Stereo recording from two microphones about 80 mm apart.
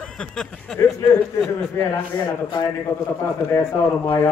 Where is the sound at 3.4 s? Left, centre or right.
Left.